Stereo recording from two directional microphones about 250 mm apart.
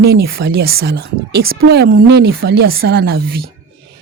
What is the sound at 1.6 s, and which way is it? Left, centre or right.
A woman's voice, right.